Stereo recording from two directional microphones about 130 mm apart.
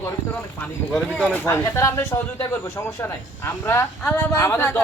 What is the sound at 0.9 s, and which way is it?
Speech, 5° left (ahead or behind).